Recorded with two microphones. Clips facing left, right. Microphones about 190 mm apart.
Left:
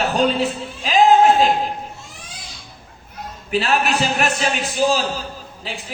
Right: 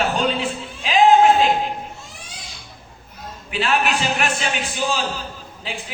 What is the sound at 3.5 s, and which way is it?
A man's voice, 40° left (ahead or behind).